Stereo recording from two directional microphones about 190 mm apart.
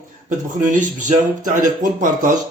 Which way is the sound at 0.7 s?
40° right (ahead or behind).